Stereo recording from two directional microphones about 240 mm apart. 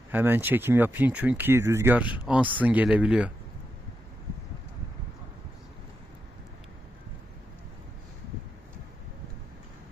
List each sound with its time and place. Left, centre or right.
0.1 s speech: centre